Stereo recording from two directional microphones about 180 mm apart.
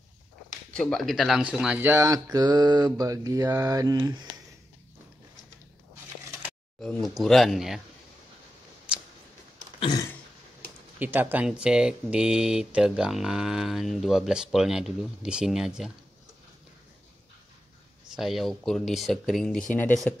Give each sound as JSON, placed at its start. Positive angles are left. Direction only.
{"t": 0.7, "sound": "speech", "side_deg": 5}
{"t": 6.8, "sound": "speech", "side_deg": 5}
{"t": 9.8, "sound": "a sound", "side_deg": 20}
{"t": 11.0, "sound": "speech", "side_deg": -10}
{"t": 18.1, "sound": "speech", "side_deg": 0}